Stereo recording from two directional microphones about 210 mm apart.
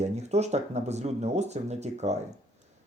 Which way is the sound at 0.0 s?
30° right (ahead or behind).